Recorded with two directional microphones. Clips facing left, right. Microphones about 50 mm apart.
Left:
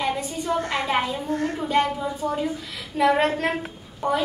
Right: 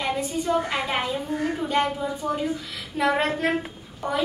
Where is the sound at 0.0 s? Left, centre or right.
Centre.